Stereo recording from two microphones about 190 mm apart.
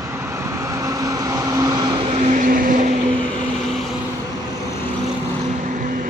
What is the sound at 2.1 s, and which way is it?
Vehicle, 40° right (ahead or behind).